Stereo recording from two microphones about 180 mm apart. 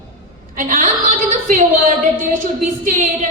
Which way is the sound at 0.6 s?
45° right (ahead or behind).